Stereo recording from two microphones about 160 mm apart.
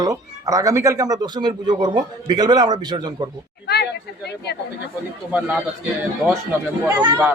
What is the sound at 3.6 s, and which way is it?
Speech, 90° left.